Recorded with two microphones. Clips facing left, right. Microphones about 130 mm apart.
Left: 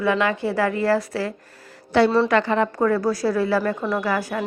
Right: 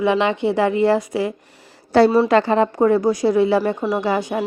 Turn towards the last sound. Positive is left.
turn(degrees=-25)  # may be behind; listen again after turning